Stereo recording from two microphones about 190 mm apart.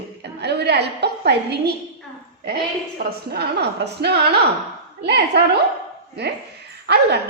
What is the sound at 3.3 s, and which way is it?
A woman's voice, 55° right (ahead or behind).